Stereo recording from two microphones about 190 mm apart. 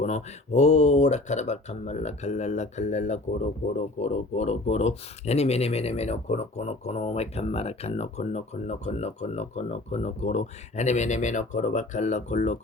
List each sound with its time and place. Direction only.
0.0 s speech: 35° left (ahead or behind)